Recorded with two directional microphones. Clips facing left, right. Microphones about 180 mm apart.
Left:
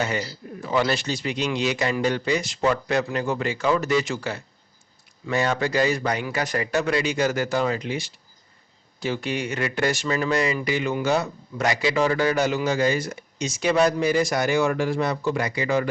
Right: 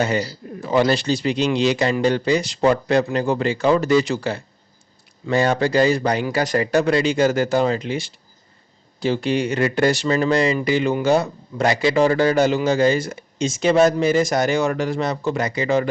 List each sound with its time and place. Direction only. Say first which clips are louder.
0.0 s a man's voice: right 5 dB; 35° right (ahead or behind)
14.2 s speech: right 4 dB; 45° right (ahead or behind)
14.8 s speech: right 2 dB; 25° right (ahead or behind)